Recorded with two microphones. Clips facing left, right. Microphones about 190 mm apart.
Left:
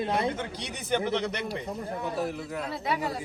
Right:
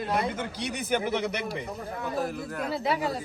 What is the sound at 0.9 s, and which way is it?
Speech, 5° right (ahead or behind).